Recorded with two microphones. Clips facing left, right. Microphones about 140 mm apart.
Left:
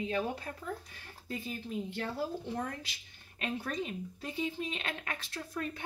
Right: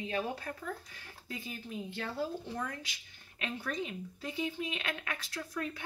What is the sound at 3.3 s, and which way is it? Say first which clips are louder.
Speech: left 1 dB; 40° left (ahead or behind).